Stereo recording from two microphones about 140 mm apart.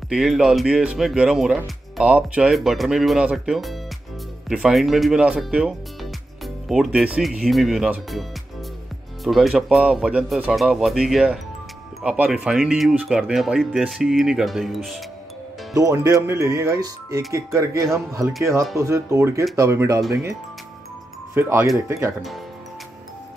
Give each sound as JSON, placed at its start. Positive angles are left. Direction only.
{"t": 0.1, "sound": "speech", "side_deg": -5}
{"t": 9.2, "sound": "speech", "side_deg": 0}
{"t": 15.7, "sound": "speech", "side_deg": -20}
{"t": 21.4, "sound": "speech", "side_deg": -20}